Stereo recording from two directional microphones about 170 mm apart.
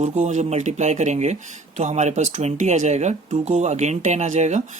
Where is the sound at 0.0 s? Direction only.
45° right (ahead or behind).